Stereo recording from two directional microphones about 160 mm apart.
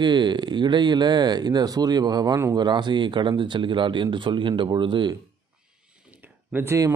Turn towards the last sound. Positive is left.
turn(degrees=-15)  # may be behind; listen again after turning